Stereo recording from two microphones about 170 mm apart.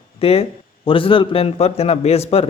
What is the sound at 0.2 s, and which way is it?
A man's voice, 35° left (ahead or behind).